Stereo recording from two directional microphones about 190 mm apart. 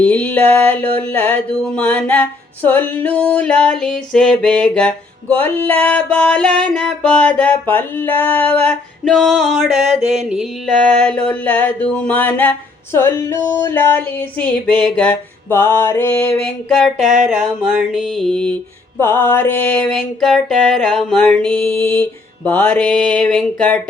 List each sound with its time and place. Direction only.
0.0 s mantra: 10° left (ahead or behind)
10.0 s a sound: 35° right (ahead or behind)
10.2 s music: centre (ahead or behind)
11.3 s mantra: 10° left (ahead or behind)
17.2 s music: centre (ahead or behind)
18.9 s mantra: 10° left (ahead or behind)
22.4 s music: 10° left (ahead or behind)